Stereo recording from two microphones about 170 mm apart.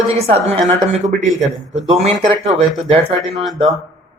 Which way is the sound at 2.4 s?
35° right (ahead or behind).